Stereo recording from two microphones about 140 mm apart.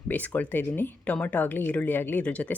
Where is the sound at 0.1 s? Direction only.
10° left (ahead or behind).